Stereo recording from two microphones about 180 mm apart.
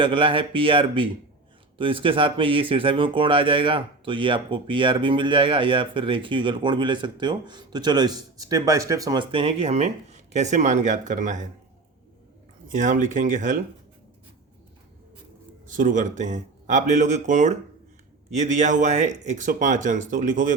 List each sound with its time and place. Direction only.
0.0 s speech: 30° right (ahead or behind); by 11.4 s 45° right (ahead or behind)
12.7 s speech: 45° right (ahead or behind)
15.7 s speech: 45° right (ahead or behind)